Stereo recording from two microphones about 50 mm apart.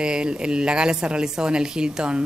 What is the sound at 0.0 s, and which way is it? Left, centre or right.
A woman's voice, centre.